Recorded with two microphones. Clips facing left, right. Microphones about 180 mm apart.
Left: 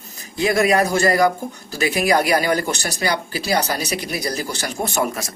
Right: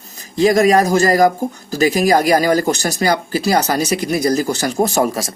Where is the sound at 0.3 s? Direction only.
35° right (ahead or behind).